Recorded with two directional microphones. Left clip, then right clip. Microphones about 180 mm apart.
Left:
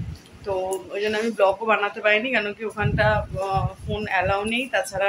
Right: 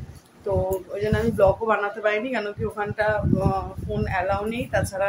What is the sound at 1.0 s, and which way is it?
Speech, centre (ahead or behind).